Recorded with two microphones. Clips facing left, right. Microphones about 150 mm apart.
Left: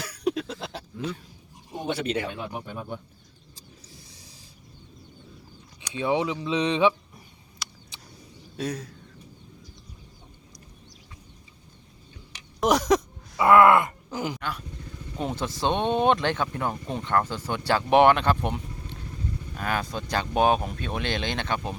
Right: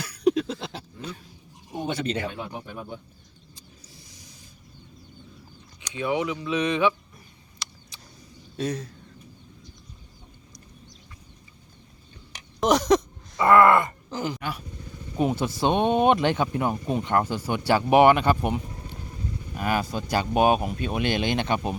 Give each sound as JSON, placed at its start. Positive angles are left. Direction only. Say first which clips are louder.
{"t": 0.3, "sound": "a sound", "louder": "right 5 dB", "side_deg": 0}
{"t": 1.9, "sound": "speech", "louder": "left 1 dB", "side_deg": 5}
{"t": 5.9, "sound": "speech", "louder": "left 1 dB", "side_deg": 25}
{"t": 7.6, "sound": "a sound", "louder": "even", "side_deg": 5}
{"t": 8.5, "sound": "speech", "louder": "right 2 dB", "side_deg": 5}
{"t": 12.5, "sound": "groan", "louder": "right 1 dB", "side_deg": 5}
{"t": 14.3, "sound": "speech", "louder": "right 1 dB", "side_deg": -10}